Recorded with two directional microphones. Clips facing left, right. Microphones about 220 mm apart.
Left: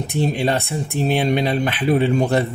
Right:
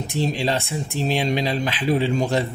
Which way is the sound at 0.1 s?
60° left (ahead or behind).